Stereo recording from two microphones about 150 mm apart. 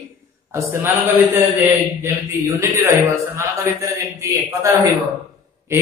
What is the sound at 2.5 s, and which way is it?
Speech, 20° right (ahead or behind).